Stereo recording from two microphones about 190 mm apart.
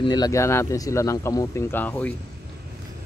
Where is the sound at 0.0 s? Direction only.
20° left (ahead or behind).